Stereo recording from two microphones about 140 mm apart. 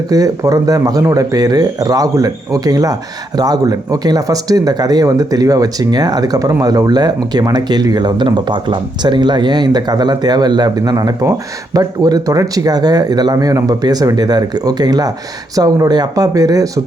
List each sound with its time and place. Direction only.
0.1 s speech: 25° right (ahead or behind)